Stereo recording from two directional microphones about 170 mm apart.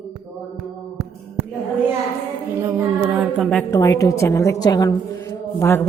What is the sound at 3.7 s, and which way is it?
A woman's voice, 20° left (ahead or behind).